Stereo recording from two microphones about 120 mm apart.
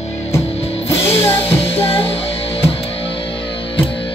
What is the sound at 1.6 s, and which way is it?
Music, 55° left (ahead or behind).